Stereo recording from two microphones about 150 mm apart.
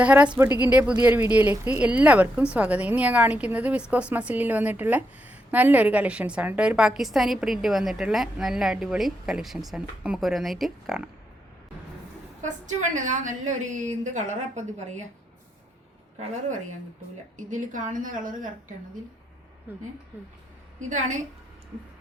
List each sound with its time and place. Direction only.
0.0 s speech: 10° right (ahead or behind)
12.4 s a woman's voice: 55° right (ahead or behind)
17.3 s a woman's voice: 60° right (ahead or behind)
19.7 s speech: 10° right (ahead or behind)
20.7 s a woman's voice: 55° right (ahead or behind)